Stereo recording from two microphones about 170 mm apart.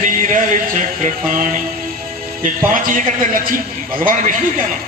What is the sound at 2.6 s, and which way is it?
Speech, 50° right (ahead or behind).